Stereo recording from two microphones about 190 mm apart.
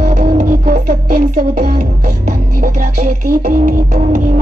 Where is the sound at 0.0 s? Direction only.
45° right (ahead or behind).